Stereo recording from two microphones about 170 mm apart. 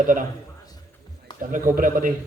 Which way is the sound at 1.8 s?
55° right (ahead or behind).